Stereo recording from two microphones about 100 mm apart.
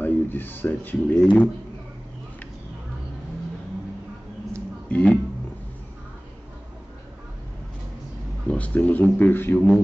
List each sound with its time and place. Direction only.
0.0 s speech: 20° left (ahead or behind)
4.8 s speech: 10° left (ahead or behind)
8.5 s speech: 15° left (ahead or behind)